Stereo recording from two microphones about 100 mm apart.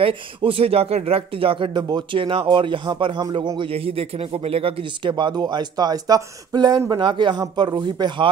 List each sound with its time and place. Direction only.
0.0 s speech: 65° right (ahead or behind)
3.2 s speech: 45° right (ahead or behind); by 5.1 s 70° right (ahead or behind)
5.1 s speech: 45° right (ahead or behind)